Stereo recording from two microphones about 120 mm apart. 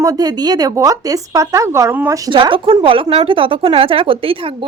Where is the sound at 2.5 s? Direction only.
45° right (ahead or behind).